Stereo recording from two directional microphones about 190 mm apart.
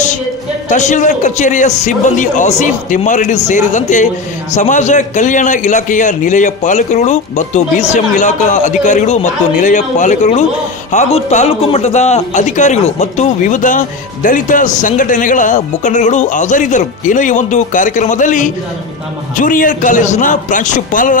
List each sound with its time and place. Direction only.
0.7 s a man's voice: 40° left (ahead or behind)